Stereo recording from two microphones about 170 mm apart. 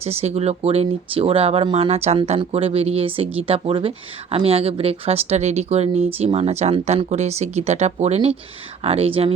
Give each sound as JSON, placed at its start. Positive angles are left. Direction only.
{"t": 0.0, "sound": "speech", "side_deg": -40}